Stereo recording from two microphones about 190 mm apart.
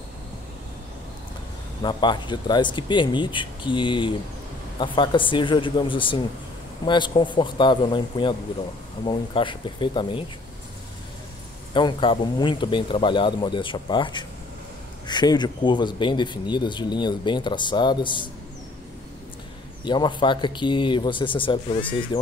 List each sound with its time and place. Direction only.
1.8 s speech: 25° left (ahead or behind)
11.7 s speech: 25° left (ahead or behind)
19.8 s speech: 25° left (ahead or behind)